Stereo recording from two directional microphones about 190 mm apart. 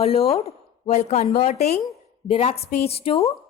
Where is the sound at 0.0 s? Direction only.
35° left (ahead or behind).